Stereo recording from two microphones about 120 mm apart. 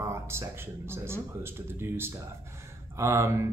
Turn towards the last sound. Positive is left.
turn(degrees=-25)  # may be behind; listen again after turning